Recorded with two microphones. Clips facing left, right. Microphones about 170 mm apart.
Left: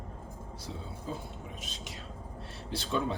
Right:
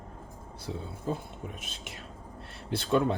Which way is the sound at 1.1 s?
55° right (ahead or behind).